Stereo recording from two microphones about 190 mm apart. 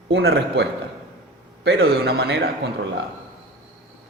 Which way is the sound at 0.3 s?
65° right (ahead or behind).